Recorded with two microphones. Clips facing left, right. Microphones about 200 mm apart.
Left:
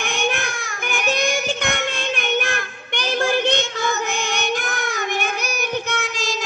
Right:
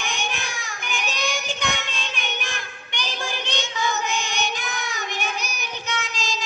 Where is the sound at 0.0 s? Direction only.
55° left (ahead or behind).